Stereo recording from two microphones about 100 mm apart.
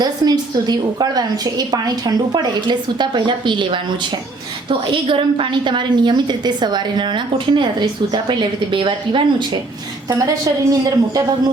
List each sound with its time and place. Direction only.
0.0 s a woman's voice: 40° right (ahead or behind)
4.9 s a woman's voice: 60° right (ahead or behind)
10.7 s speech: 40° right (ahead or behind)